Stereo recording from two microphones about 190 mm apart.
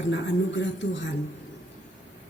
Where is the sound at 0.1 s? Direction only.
75° left (ahead or behind).